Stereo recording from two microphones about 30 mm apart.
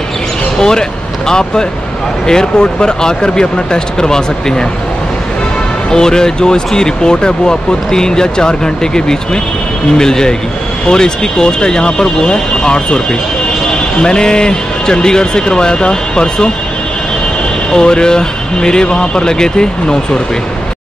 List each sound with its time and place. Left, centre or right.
0.6 s speech: left
5.9 s speech: left
14.0 s speech: left
17.7 s speech: left